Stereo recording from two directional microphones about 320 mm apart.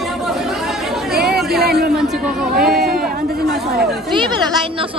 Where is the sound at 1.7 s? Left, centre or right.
Right.